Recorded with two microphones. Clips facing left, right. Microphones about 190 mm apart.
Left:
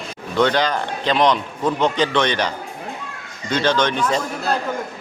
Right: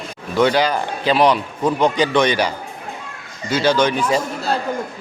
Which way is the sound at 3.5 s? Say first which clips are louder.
Right 2 dB; 10° right (ahead or behind).